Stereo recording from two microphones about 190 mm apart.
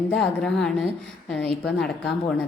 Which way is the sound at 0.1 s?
5° left (ahead or behind).